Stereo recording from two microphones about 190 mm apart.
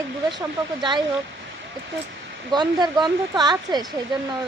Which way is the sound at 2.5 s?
20° right (ahead or behind).